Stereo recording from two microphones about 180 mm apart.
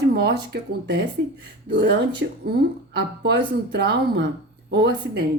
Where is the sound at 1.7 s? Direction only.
75° right (ahead or behind).